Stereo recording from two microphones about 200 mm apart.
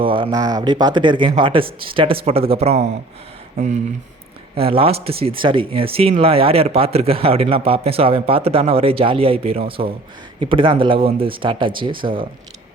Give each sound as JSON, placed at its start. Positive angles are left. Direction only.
{"t": 0.0, "sound": "speech", "side_deg": -25}
{"t": 4.5, "sound": "speech", "side_deg": -30}